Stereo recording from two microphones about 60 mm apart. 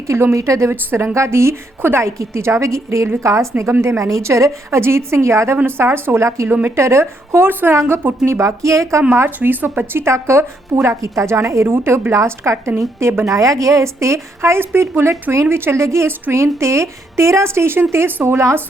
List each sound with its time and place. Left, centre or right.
0.1 s a woman's voice: right
3.7 s a woman's voice: right
3.9 s a woman's voice: right
5.6 s a woman's voice: right
7.7 s a woman's voice: right
9.1 s a woman's voice: right
10.8 s speech: right
11.6 s a woman's voice: right
12.1 s a woman's voice: right